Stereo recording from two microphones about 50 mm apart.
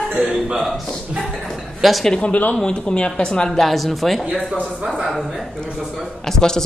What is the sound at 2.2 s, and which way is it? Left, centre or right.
Speech, left.